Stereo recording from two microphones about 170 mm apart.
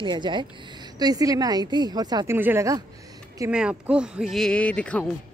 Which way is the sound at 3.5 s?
5° right (ahead or behind).